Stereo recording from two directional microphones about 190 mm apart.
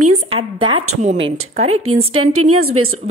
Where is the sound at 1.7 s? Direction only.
90° right.